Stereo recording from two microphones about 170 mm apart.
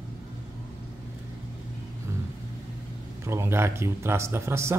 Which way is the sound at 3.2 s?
15° right (ahead or behind).